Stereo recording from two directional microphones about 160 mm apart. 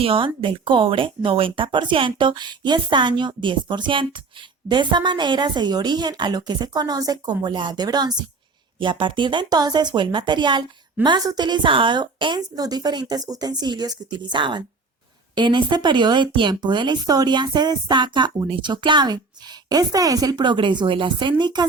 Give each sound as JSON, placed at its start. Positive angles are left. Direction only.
{"t": 0.0, "sound": "speech", "side_deg": -35}